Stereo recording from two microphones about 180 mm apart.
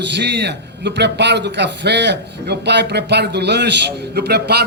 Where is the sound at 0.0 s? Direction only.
75° right (ahead or behind).